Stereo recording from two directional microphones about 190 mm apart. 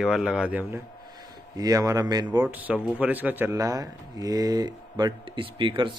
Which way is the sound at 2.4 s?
5° right (ahead or behind).